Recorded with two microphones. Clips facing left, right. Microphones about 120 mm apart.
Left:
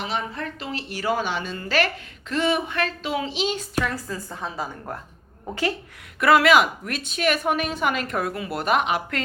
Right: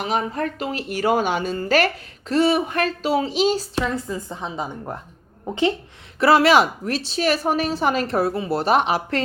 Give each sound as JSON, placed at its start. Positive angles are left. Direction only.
{"t": 0.0, "sound": "a woman's voice", "side_deg": -45}
{"t": 6.1, "sound": "a woman's voice", "side_deg": -30}